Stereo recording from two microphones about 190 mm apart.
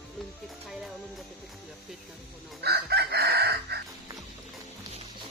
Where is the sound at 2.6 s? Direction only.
60° right (ahead or behind).